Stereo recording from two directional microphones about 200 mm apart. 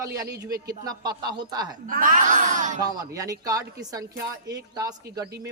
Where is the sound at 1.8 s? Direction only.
40° right (ahead or behind).